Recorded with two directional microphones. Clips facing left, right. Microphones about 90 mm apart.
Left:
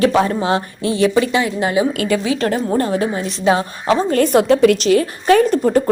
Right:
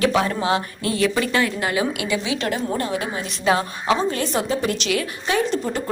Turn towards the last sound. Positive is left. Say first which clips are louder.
# left 9 dB
turn(degrees=50)  # may be behind; listen again after turning